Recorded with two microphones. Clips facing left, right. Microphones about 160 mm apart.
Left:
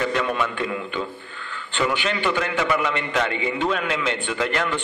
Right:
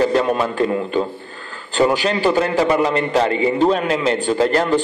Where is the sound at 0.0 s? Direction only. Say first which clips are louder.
Right 7 dB; 35° right (ahead or behind).